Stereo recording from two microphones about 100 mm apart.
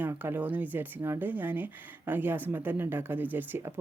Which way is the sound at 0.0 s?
20° right (ahead or behind).